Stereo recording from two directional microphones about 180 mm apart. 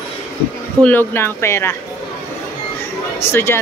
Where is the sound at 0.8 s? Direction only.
10° left (ahead or behind).